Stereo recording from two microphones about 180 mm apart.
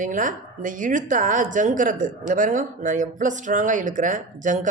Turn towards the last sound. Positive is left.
turn(degrees=-45)  # may be behind; listen again after turning